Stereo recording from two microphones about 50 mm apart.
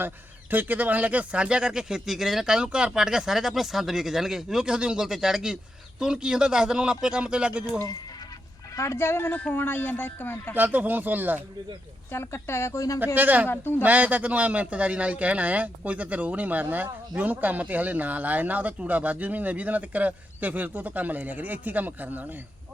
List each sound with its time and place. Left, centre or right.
0.5 s speech: right
8.8 s speech: left
9.3 s speech: left
10.5 s a man's voice: right
12.1 s speech: left
13.1 s a man's voice: right
13.5 s speech: left
13.8 s a man's voice: right